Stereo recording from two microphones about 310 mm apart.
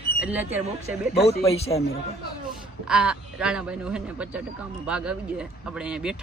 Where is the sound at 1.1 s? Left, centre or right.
Left.